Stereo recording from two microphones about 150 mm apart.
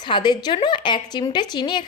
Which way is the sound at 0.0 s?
30° left (ahead or behind).